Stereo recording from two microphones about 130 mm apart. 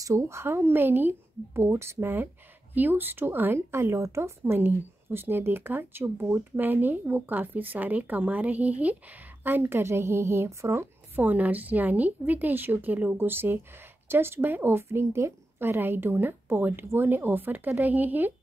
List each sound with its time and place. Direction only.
0.0 s a woman's voice: 20° right (ahead or behind)